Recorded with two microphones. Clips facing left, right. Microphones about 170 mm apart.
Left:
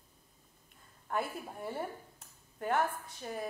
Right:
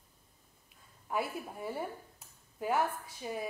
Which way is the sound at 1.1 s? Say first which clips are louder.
Right 1 dB; 5° right (ahead or behind).